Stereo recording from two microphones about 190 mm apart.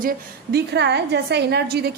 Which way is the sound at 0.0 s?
55° right (ahead or behind).